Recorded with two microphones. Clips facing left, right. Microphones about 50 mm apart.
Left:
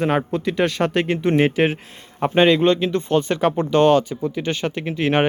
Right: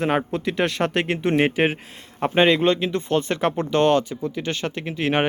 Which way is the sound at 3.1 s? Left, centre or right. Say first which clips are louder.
Left 3 dB; centre.